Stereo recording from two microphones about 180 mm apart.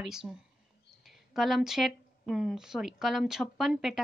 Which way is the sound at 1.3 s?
Centre (ahead or behind).